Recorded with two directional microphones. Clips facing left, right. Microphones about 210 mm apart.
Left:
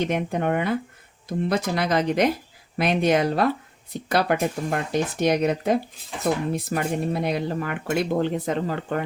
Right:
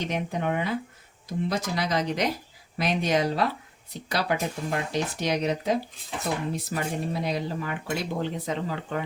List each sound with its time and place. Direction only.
0.0 s speech: 55° left (ahead or behind)